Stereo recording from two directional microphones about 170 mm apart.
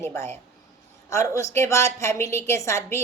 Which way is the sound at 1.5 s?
15° left (ahead or behind).